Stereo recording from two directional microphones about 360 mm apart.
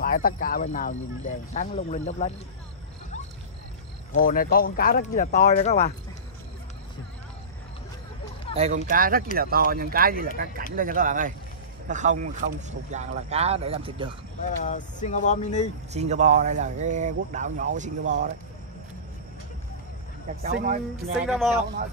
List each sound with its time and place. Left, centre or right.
0.0 s speech: left
4.1 s speech: left
8.5 s speech: centre
14.6 s speech: centre
15.9 s speech: centre
20.5 s speech: centre
21.3 s speech: centre